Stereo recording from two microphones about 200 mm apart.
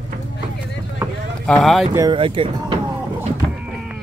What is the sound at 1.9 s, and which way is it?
Speech, 20° right (ahead or behind).